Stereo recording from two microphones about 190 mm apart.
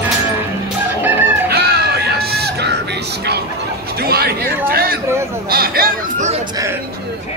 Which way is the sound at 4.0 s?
55° right (ahead or behind).